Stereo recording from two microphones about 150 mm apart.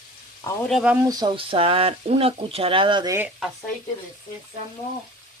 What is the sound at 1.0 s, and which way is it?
Speech, 25° right (ahead or behind).